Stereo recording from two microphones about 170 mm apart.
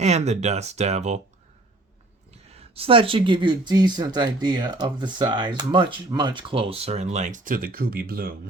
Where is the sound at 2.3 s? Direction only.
35° right (ahead or behind); by 8.5 s 60° right (ahead or behind).